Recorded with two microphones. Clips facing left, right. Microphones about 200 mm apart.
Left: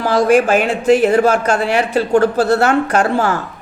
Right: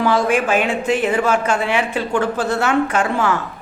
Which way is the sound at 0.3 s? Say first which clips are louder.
Left 5 dB; 40° left (ahead or behind).